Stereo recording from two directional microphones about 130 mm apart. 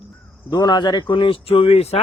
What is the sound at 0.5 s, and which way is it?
Speech, 35° left (ahead or behind).